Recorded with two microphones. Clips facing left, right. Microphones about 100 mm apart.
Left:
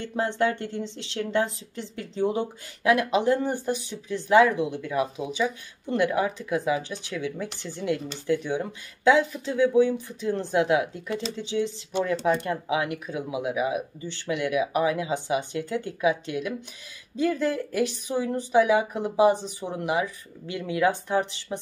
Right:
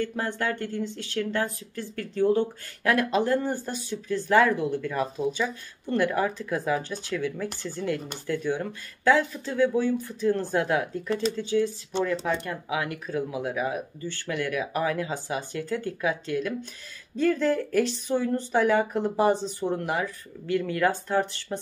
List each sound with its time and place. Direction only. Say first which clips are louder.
0.0 s a woman's voice: left 3 dB; 20° left (ahead or behind)